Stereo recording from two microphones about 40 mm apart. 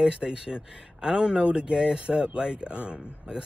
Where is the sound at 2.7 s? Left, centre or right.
Right.